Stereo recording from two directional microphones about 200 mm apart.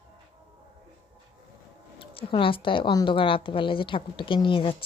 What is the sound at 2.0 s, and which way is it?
A woman's voice, 25° left (ahead or behind).